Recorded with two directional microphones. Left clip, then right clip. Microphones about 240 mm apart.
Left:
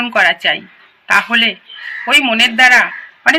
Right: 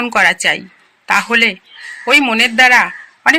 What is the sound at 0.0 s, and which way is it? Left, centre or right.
A woman's voice, right.